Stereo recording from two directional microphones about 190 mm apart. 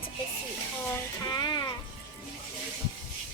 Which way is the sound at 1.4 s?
25° left (ahead or behind).